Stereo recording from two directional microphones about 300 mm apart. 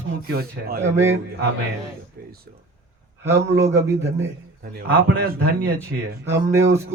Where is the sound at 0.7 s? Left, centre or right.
Centre.